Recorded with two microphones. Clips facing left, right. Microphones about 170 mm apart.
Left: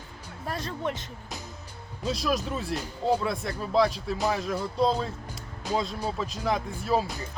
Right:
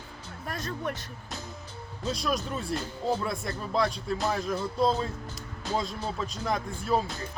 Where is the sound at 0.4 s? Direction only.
30° left (ahead or behind).